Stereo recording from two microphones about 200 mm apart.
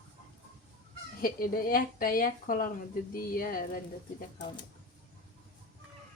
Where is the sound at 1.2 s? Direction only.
45° left (ahead or behind).